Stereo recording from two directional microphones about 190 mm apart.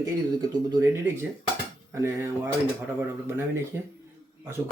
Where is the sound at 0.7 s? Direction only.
15° right (ahead or behind).